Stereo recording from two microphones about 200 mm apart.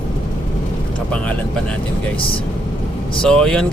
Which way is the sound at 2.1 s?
25° left (ahead or behind).